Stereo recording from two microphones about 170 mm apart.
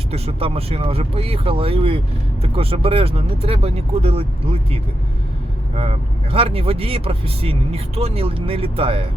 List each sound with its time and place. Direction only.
0.1 s speech: 35° right (ahead or behind)
5.7 s speech: 35° right (ahead or behind)